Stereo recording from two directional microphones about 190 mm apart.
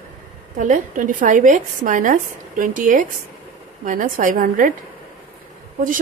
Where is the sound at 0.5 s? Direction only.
40° right (ahead or behind).